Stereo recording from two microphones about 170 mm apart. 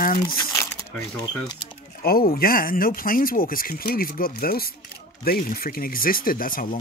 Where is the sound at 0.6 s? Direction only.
20° left (ahead or behind).